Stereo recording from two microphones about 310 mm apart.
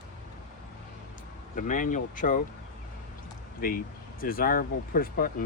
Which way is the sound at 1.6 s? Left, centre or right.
Left.